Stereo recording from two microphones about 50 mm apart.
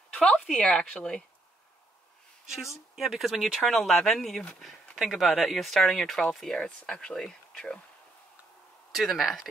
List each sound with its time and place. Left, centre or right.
0.3 s speech: centre
2.4 s a woman's voice: centre
4.9 s speech: centre
6.6 s speech: left
8.9 s speech: centre